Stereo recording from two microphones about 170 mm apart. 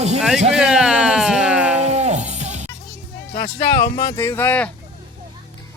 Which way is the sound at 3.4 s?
40° left (ahead or behind).